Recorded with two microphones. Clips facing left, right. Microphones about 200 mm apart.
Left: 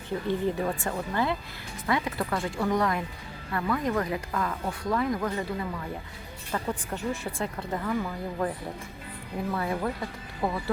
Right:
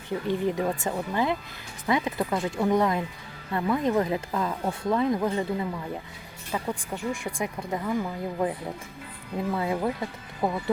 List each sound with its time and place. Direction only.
0.3 s speech: 15° right (ahead or behind)
9.6 s speech: 20° right (ahead or behind)